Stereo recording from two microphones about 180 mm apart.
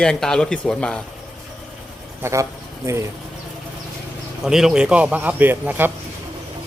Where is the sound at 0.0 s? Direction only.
5° left (ahead or behind).